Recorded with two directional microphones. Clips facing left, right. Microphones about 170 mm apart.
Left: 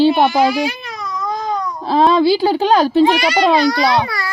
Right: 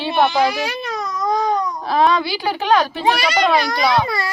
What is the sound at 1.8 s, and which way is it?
Speech, 30° left (ahead or behind).